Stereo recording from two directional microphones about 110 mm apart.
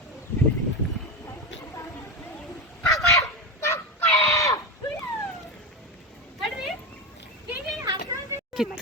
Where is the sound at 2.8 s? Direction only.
30° left (ahead or behind).